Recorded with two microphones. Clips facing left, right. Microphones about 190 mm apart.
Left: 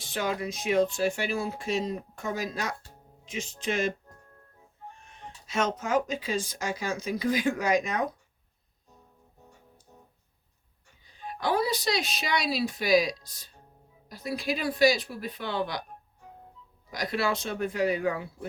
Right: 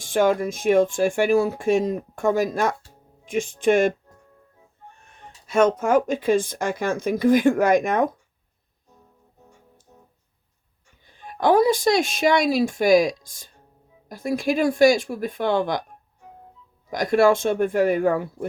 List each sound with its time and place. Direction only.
0.0 s speech: 50° right (ahead or behind)
5.5 s speech: 55° right (ahead or behind)
11.0 s speech: 50° right (ahead or behind)
16.9 s speech: 50° right (ahead or behind)